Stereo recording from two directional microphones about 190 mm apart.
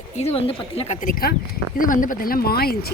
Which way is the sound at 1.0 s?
50° left (ahead or behind).